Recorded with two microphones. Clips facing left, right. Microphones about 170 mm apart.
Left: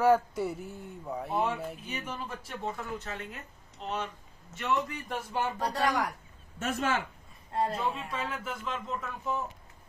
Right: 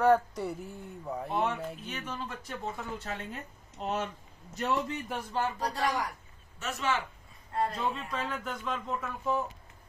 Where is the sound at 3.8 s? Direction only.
45° right (ahead or behind).